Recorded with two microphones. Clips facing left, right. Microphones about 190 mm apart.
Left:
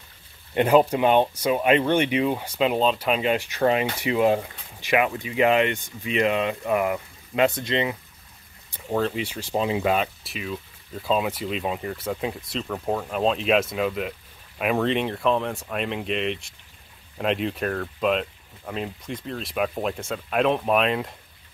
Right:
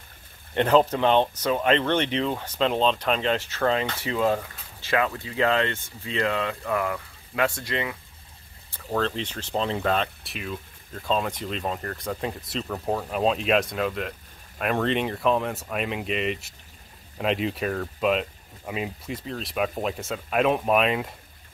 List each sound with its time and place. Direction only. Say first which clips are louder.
0.6 s speech: left 2 dB; 10° left (ahead or behind)